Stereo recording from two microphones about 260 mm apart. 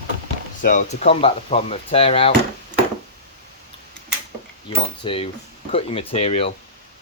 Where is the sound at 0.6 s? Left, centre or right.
Left.